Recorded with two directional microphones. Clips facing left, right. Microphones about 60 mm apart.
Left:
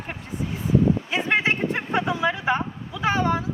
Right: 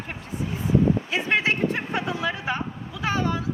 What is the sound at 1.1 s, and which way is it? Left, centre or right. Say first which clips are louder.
A man's voice: left 1 dB; left.